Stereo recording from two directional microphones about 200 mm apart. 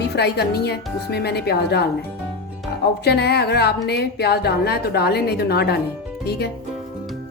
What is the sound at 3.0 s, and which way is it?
Speech, 55° left (ahead or behind).